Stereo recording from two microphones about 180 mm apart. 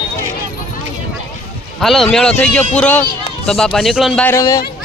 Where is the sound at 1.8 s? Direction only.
Centre (ahead or behind).